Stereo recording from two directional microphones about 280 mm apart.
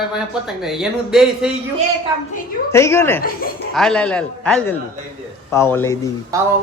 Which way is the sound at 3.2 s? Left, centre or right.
Left.